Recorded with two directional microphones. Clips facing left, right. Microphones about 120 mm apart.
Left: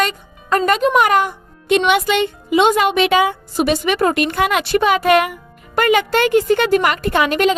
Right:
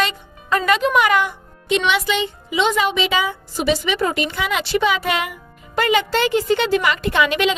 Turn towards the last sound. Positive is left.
turn(degrees=45)  # may be behind; listen again after turning